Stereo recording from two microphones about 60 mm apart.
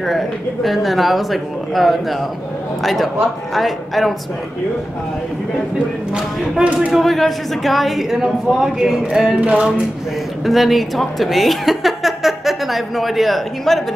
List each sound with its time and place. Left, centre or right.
0.7 s speech: centre
6.1 s speech: centre
6.9 s speech: centre
9.4 s a sound: centre
10.4 s a woman's voice: centre